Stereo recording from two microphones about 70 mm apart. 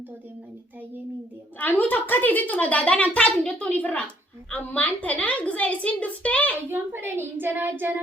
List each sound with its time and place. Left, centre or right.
1.5 s a woman's voice: left
6.7 s speech: right